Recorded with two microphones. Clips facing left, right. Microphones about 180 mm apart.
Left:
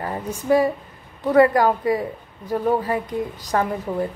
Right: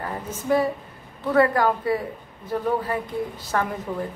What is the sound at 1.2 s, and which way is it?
A woman's voice, 15° left (ahead or behind).